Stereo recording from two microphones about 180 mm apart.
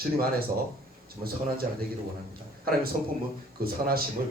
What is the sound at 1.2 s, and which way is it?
Speech, 35° right (ahead or behind).